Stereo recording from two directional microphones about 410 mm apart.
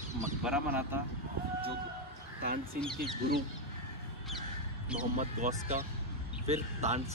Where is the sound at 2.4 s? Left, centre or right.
Right.